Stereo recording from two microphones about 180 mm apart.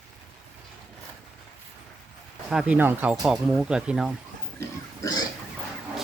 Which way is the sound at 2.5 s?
5° right (ahead or behind).